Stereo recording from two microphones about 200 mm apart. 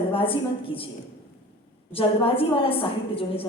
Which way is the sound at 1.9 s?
30° left (ahead or behind).